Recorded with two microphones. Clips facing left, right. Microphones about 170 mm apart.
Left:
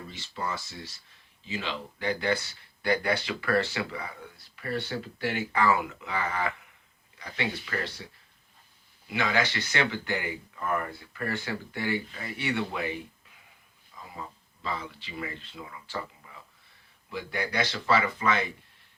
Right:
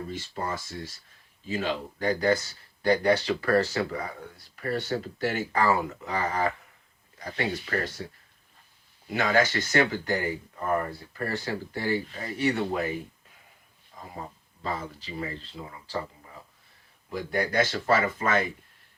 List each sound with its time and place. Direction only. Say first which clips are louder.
0.1 s speech: right 2 dB; 50° right (ahead or behind)
9.0 s speech: right 4 dB; 45° right (ahead or behind)